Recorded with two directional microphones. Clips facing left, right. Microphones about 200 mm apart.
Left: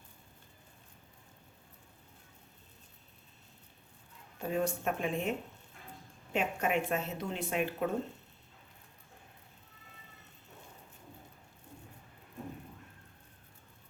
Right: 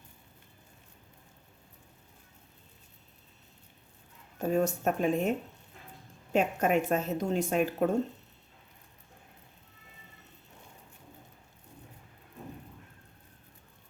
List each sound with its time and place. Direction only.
4.4 s speech: 45° right (ahead or behind)
6.3 s speech: 45° right (ahead or behind)